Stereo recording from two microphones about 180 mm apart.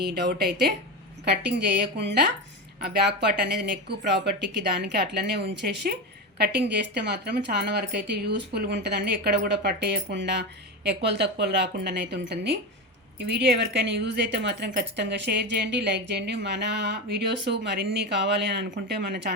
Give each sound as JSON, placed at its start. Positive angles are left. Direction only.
{"t": 0.0, "sound": "a woman's voice", "side_deg": -65}